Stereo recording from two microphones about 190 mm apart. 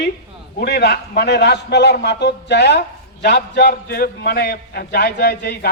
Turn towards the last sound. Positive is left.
turn(degrees=60)  # may be behind; listen again after turning